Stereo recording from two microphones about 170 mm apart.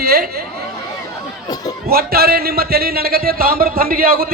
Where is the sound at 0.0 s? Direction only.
60° right (ahead or behind).